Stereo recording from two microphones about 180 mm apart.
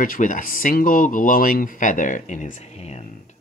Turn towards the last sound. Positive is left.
turn(degrees=40)  # may be behind; listen again after turning